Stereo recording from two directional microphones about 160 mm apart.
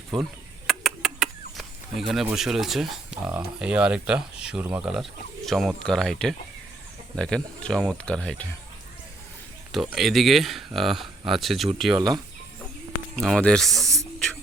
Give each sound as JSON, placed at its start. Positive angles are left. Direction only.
{"t": 0.1, "sound": "speech", "side_deg": 0}
{"t": 9.7, "sound": "speech", "side_deg": 0}
{"t": 11.9, "sound": "speech", "side_deg": -25}
{"t": 13.1, "sound": "speech", "side_deg": 5}